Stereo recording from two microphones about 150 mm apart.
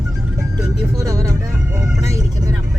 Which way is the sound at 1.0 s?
20° right (ahead or behind).